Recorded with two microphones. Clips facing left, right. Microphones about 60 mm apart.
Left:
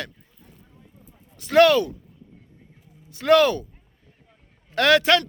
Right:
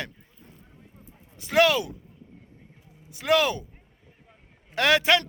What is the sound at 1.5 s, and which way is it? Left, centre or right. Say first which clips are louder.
Speech: left 5 dB; centre.